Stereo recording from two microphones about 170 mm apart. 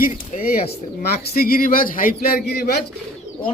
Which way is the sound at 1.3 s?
60° left (ahead or behind).